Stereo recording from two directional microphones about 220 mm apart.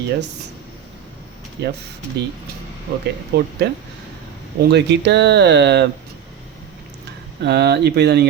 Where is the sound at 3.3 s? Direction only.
45° right (ahead or behind).